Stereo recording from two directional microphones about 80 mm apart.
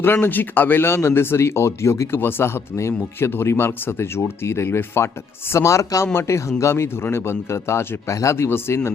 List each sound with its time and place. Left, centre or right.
0.0 s speech: left